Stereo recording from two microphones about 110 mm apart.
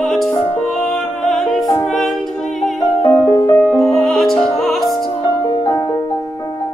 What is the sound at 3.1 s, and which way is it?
Music, 20° left (ahead or behind).